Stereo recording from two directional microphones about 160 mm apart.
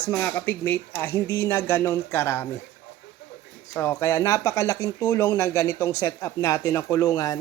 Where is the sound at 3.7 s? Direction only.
20° left (ahead or behind).